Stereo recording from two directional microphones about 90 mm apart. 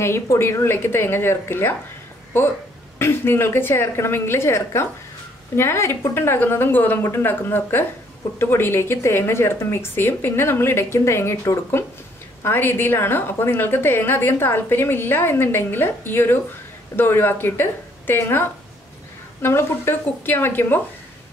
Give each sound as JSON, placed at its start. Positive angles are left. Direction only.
{"t": 0.0, "sound": "a woman's voice", "side_deg": 30}
{"t": 3.0, "sound": "a woman's voice", "side_deg": 25}